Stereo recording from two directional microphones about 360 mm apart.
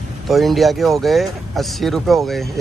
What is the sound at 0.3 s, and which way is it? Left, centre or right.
Speech, centre.